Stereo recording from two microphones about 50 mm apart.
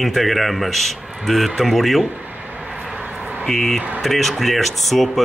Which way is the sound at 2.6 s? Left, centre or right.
Centre.